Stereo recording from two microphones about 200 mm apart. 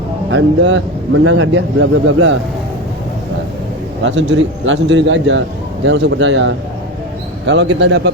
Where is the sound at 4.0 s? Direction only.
65° right (ahead or behind).